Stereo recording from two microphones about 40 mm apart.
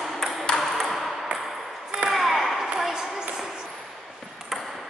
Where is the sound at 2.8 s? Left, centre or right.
Centre.